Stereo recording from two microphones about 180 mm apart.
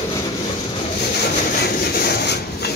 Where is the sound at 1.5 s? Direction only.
60° left (ahead or behind).